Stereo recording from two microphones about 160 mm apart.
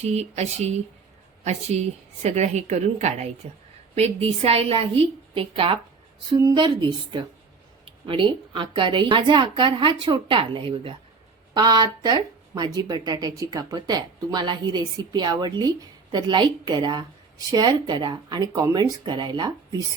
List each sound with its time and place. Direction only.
0.0 s a woman's voice: 40° right (ahead or behind); by 19.8 s 25° right (ahead or behind)